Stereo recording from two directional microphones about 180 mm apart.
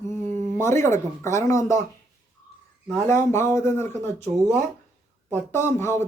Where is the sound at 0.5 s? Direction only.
15° left (ahead or behind).